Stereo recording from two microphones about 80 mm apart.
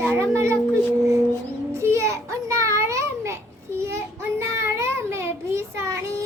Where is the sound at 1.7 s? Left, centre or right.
Right.